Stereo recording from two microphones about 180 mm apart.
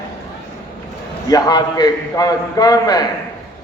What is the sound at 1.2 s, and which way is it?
A man's voice, 20° left (ahead or behind).